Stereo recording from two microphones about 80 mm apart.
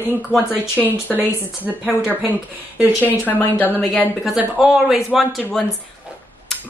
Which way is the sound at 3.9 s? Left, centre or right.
Centre.